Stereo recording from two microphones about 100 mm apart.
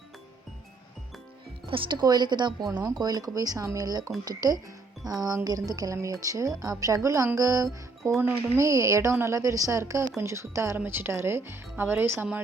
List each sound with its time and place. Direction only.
1.7 s a woman's voice: 55° right (ahead or behind); by 12.4 s 20° right (ahead or behind)